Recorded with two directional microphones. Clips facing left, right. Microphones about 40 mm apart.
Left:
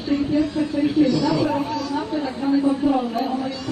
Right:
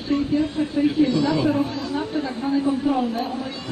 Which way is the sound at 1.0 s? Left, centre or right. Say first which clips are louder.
Left 1 dB; right.